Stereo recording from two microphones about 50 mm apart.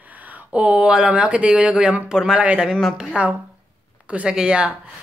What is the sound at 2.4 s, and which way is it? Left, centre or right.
Speech, right.